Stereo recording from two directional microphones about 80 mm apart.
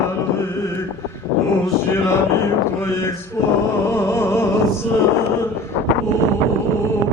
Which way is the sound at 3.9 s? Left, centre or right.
Left.